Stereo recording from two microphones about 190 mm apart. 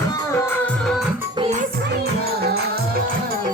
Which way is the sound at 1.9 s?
55° right (ahead or behind).